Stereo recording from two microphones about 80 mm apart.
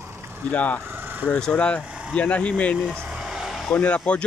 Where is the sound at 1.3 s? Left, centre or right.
Centre.